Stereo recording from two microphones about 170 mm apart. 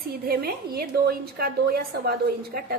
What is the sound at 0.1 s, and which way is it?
A woman's voice, 65° right (ahead or behind).